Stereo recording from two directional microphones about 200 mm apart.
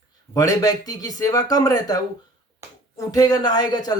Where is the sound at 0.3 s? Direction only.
15° left (ahead or behind).